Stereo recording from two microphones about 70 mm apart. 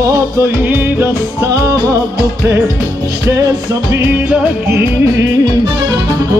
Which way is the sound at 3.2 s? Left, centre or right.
Right.